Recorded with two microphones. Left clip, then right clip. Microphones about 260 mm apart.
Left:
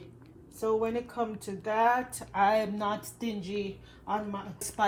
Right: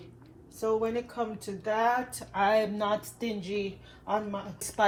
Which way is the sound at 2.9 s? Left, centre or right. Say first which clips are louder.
Right 3 dB; centre.